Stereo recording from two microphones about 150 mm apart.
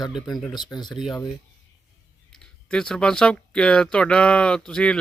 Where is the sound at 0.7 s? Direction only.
30° left (ahead or behind).